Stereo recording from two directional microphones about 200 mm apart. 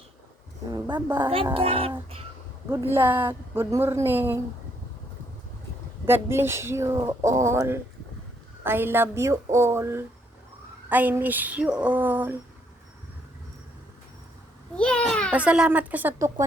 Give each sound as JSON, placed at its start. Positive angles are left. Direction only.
{"t": 0.7, "sound": "speech", "side_deg": -25}
{"t": 1.0, "sound": "speech", "side_deg": -10}
{"t": 1.5, "sound": "speech", "side_deg": -30}
{"t": 2.9, "sound": "speech", "side_deg": -10}
{"t": 6.1, "sound": "speech", "side_deg": -10}
{"t": 14.8, "sound": "a child's voice", "side_deg": 5}
{"t": 15.3, "sound": "speech", "side_deg": -5}